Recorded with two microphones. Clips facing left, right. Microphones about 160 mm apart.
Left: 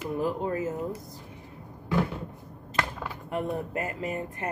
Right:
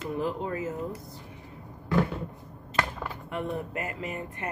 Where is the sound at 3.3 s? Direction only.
40° left (ahead or behind).